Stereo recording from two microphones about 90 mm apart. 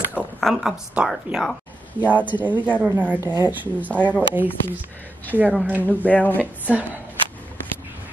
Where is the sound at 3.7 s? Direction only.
15° left (ahead or behind).